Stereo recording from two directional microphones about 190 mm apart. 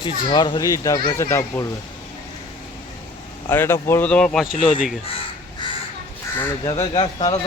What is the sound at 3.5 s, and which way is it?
Speech, 10° left (ahead or behind).